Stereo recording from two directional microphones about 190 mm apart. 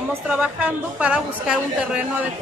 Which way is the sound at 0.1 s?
5° right (ahead or behind).